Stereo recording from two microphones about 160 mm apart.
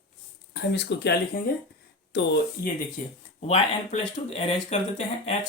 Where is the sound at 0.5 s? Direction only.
90° left.